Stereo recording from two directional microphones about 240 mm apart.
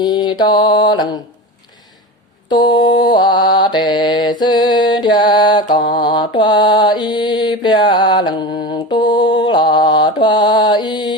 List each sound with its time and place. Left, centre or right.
0.0 s mantra: centre
2.7 s mantra: centre